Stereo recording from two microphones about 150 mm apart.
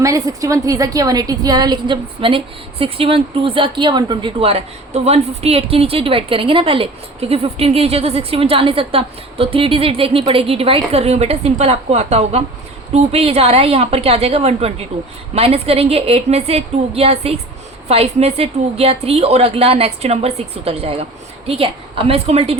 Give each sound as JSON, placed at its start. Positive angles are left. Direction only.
{"t": 0.0, "sound": "a woman's voice", "side_deg": -20}